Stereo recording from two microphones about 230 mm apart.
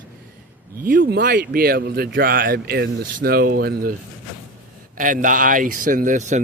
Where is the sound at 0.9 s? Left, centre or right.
Right.